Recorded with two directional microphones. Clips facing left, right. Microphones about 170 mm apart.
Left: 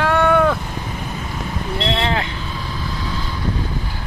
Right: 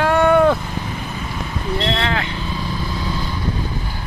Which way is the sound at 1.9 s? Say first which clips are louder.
Left 1 dB; 25° left (ahead or behind).